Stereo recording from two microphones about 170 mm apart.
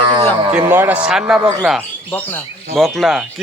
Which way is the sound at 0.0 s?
30° right (ahead or behind).